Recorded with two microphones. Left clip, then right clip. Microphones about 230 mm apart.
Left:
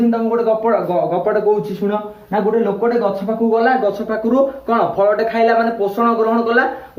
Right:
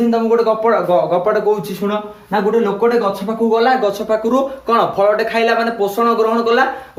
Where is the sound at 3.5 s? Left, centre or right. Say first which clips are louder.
Right 1 dB; centre.